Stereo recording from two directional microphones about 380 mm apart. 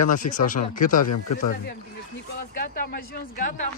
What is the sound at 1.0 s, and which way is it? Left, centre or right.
Speech, left.